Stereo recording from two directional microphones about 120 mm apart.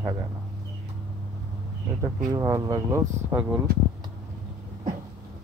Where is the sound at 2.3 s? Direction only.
30° right (ahead or behind).